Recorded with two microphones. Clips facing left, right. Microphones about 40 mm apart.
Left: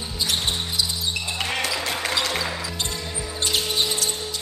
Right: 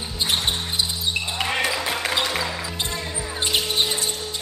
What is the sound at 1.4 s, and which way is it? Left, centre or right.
Music, centre.